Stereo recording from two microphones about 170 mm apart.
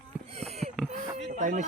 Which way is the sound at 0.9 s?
Centre (ahead or behind).